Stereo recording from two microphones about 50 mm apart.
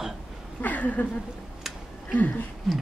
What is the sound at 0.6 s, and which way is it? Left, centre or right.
Speech, left.